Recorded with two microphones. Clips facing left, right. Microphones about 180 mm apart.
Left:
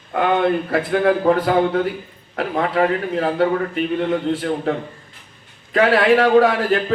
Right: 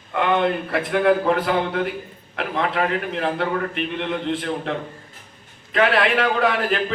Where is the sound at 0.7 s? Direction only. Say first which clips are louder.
Right 2 dB; 35° left (ahead or behind).